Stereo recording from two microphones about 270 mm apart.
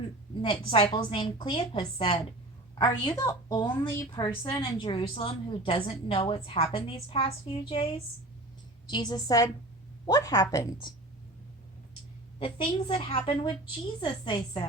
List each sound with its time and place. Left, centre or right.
0.4 s a woman's voice: centre
12.4 s a woman's voice: centre